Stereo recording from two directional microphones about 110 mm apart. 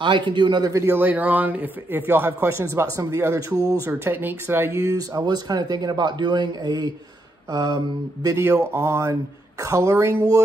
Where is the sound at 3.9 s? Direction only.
20° right (ahead or behind).